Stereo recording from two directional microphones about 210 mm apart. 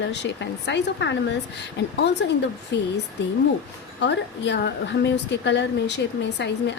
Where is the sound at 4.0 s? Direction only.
55° left (ahead or behind).